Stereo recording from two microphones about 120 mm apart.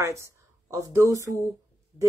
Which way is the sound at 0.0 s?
25° right (ahead or behind).